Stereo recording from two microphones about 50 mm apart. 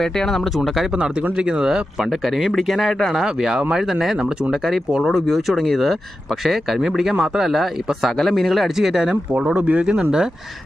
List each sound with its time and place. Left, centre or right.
0.0 s speech: centre
1.4 s speech: centre
5.0 s speech: centre
9.6 s speech: right